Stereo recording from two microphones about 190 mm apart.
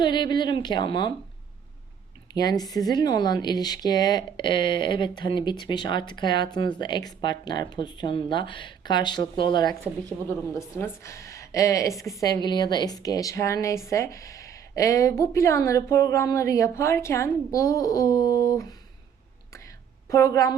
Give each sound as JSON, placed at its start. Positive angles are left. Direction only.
{"t": 0.0, "sound": "speech", "side_deg": 25}
{"t": 2.3, "sound": "a woman's voice", "side_deg": 20}
{"t": 20.1, "sound": "a woman's voice", "side_deg": 15}